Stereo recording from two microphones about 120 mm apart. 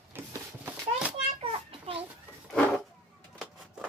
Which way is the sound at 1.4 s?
55° right (ahead or behind).